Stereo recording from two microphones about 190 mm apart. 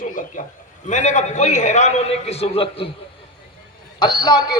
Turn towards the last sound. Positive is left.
turn(degrees=20)  # may be behind; listen again after turning